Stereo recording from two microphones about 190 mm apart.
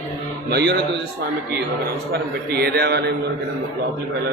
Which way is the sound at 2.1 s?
55° right (ahead or behind).